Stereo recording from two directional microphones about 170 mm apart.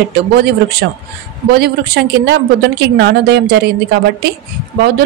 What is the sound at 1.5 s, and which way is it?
Speech, 70° right (ahead or behind).